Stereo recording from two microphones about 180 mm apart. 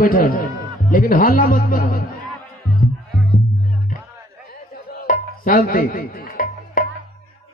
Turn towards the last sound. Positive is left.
turn(degrees=55)  # may be behind; listen again after turning